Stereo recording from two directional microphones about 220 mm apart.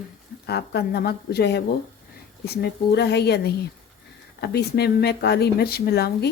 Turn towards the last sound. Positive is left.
turn(degrees=45)  # may be behind; listen again after turning